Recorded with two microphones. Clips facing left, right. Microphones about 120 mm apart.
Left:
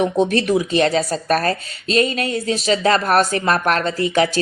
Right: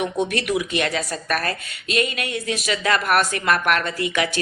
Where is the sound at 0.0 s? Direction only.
35° left (ahead or behind).